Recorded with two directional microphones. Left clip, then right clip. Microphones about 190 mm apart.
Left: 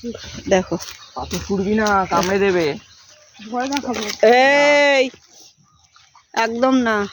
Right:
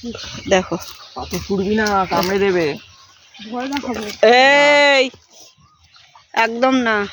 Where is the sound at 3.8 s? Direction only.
10° right (ahead or behind).